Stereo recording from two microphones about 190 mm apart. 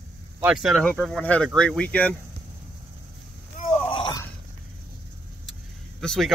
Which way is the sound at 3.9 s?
20° left (ahead or behind).